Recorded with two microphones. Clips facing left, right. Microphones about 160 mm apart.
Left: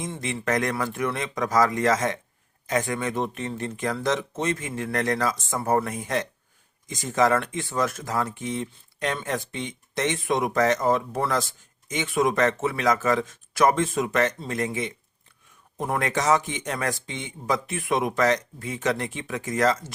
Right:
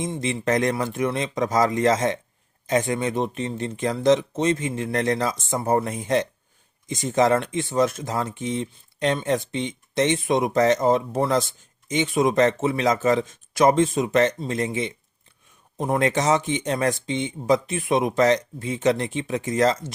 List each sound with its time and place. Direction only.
0.0 s speech: 20° right (ahead or behind)